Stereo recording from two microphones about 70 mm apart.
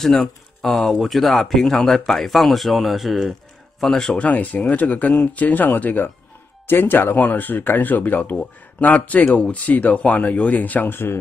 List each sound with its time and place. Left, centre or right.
0.0 s speech: centre
4.2 s speech: left